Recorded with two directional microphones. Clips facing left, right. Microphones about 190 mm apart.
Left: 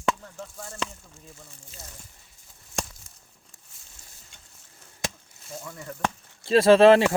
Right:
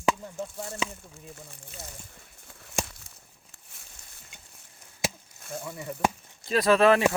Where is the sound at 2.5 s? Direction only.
70° right (ahead or behind).